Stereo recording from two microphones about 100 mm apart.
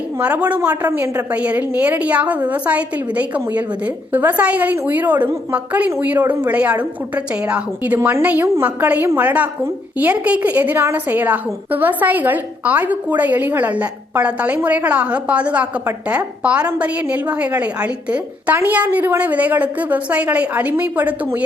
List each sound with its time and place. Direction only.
0.2 s a woman's voice: 15° right (ahead or behind)